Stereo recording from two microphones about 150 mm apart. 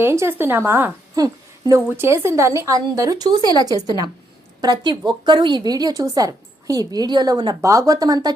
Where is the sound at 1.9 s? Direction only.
15° right (ahead or behind).